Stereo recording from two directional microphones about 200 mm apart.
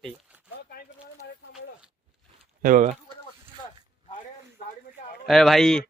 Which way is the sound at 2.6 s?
40° right (ahead or behind).